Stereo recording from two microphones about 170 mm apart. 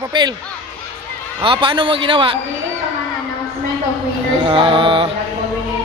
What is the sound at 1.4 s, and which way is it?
Speech, 30° right (ahead or behind).